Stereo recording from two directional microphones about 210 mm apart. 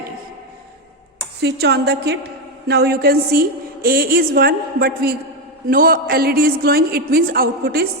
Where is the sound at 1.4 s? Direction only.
55° right (ahead or behind).